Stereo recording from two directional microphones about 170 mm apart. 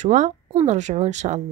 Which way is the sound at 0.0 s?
45° right (ahead or behind).